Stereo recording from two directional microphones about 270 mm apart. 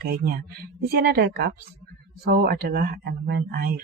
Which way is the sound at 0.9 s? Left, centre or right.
Right.